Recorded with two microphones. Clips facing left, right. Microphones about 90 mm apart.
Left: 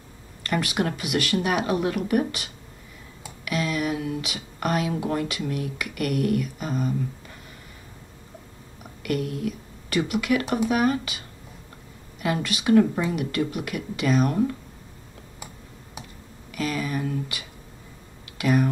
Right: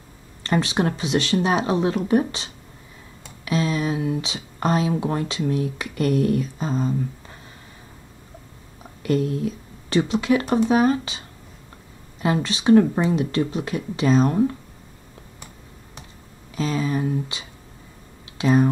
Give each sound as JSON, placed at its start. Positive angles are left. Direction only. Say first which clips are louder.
{"t": 0.4, "sound": "speech", "louder": "right 4 dB", "side_deg": -30}
{"t": 9.0, "sound": "speech", "louder": "right 5 dB", "side_deg": -30}
{"t": 16.5, "sound": "speech", "louder": "right 4 dB", "side_deg": -25}